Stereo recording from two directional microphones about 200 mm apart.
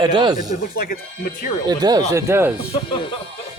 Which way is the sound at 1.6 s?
20° right (ahead or behind).